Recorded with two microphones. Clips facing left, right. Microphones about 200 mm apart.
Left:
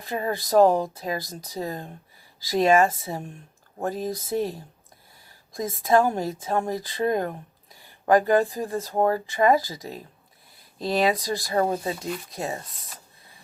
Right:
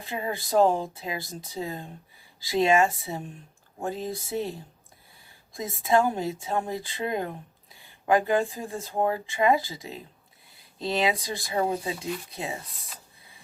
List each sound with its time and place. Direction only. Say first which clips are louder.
0.1 s speech: left 4 dB; 40° left (ahead or behind)
5.5 s speech: left 3 dB; 45° left (ahead or behind)